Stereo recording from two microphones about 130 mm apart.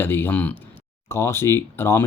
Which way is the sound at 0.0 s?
15° left (ahead or behind).